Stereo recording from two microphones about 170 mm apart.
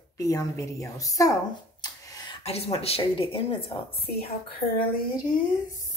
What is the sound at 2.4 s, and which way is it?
Speech, 35° left (ahead or behind).